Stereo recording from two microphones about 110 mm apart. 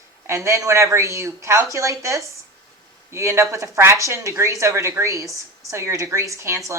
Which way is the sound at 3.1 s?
25° right (ahead or behind).